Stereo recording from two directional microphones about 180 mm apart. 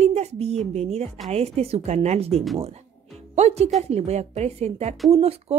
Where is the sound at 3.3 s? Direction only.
35° right (ahead or behind).